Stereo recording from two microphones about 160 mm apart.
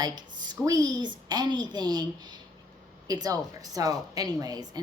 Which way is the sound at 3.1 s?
25° right (ahead or behind).